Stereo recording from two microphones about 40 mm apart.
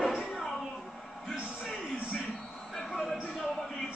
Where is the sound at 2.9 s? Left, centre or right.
Centre.